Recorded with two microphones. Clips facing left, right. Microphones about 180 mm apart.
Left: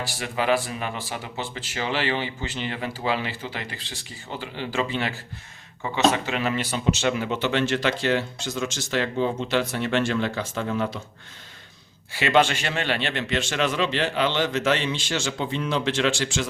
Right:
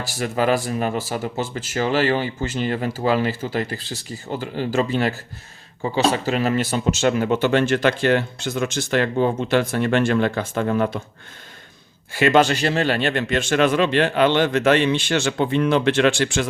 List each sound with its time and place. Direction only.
0.2 s speech: 40° right (ahead or behind)
12.1 s speech: 45° right (ahead or behind)